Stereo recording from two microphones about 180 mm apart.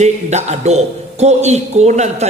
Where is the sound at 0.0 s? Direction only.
40° right (ahead or behind).